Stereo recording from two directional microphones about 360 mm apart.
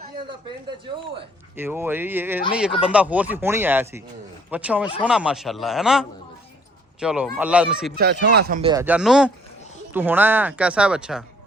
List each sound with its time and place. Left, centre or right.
1.5 s speech: centre
7.9 s speech: right
8.7 s speech: centre